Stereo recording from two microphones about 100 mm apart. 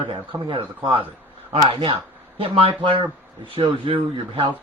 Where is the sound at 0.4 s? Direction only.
60° right (ahead or behind).